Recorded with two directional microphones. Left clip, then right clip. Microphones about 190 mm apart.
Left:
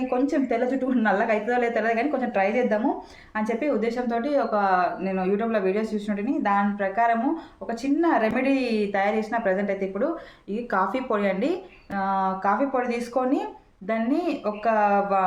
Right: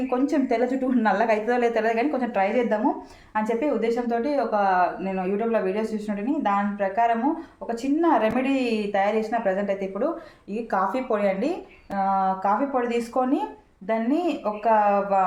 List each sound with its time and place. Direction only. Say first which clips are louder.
0.1 s a woman's voice: right 1 dB; 15° left (ahead or behind)